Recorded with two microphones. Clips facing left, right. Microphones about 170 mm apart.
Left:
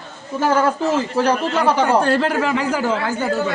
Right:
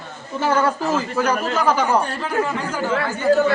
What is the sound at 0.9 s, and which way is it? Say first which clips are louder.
Speech: left 3 dB; 30° left (ahead or behind).